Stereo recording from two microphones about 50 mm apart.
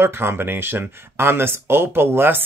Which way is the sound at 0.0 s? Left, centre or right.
Right.